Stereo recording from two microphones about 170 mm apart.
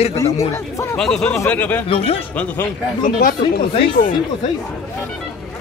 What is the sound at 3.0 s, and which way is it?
Speech, 55° left (ahead or behind).